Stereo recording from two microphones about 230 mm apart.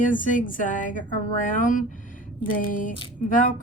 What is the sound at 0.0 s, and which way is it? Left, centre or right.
A woman's voice, left.